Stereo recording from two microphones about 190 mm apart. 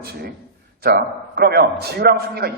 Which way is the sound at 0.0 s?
55° right (ahead or behind).